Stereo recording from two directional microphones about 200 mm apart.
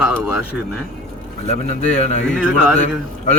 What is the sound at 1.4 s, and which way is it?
Speech, 35° left (ahead or behind).